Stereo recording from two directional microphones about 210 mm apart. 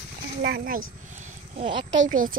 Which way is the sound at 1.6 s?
25° right (ahead or behind).